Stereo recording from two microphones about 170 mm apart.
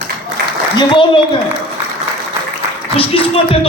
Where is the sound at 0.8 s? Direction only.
30° left (ahead or behind).